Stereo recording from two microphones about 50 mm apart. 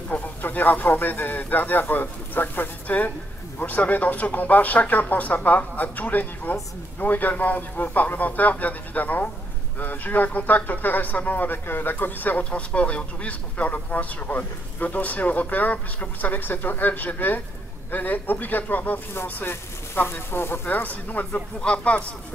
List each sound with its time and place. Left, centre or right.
0.4 s a man's voice: left
12.4 s a man's voice: left
20.0 s speech: left
20.7 s a man's voice: left
21.5 s speech: left